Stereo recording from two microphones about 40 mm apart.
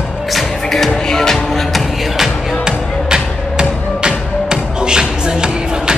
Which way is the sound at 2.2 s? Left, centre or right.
Centre.